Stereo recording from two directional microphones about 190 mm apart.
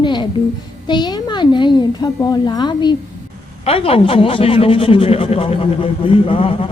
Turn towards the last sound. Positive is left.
turn(degrees=30)  # may be behind; listen again after turning